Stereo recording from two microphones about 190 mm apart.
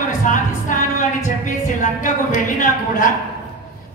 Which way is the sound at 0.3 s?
40° left (ahead or behind).